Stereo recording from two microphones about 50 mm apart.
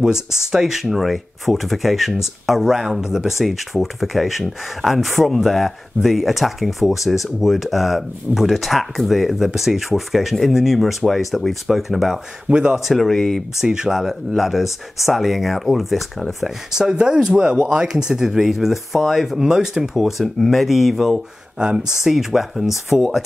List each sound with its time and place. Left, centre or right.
0.0 s speech: centre
12.4 s speech: right
12.8 s speech: centre
13.6 s speech: centre
16.7 s speech: centre
21.5 s speech: centre
22.0 s speech: centre